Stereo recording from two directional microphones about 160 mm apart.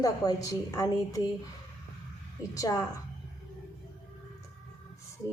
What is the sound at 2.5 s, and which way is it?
Speech, 20° left (ahead or behind).